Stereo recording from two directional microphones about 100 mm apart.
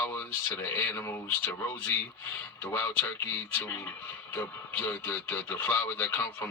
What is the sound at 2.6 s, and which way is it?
Speech, 15° left (ahead or behind).